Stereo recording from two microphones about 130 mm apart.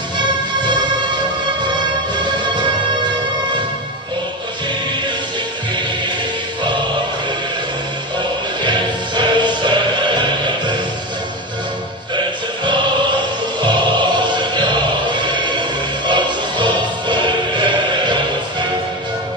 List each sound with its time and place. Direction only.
8.6 s music: 35° right (ahead or behind)
12.2 s music: 35° right (ahead or behind)